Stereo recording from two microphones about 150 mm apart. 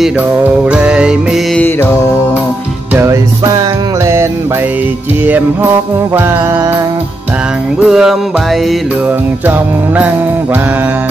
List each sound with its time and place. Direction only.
0.7 s music: 10° right (ahead or behind)
2.9 s music: 15° right (ahead or behind)
5.2 s music: 10° right (ahead or behind)
7.8 s music: 5° right (ahead or behind)
9.5 s music: 10° right (ahead or behind)